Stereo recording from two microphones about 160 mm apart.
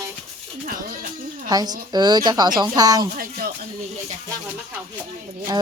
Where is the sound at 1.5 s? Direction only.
25° right (ahead or behind).